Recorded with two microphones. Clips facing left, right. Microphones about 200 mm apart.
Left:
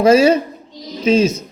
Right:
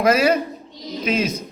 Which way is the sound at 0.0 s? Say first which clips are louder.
Left 6 dB; 25° left (ahead or behind).